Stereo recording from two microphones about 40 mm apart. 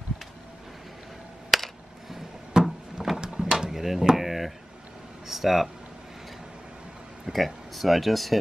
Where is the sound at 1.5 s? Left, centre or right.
Centre.